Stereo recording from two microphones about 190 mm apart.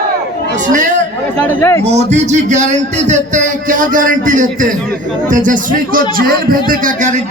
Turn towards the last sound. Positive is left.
turn(degrees=-40)  # may be behind; listen again after turning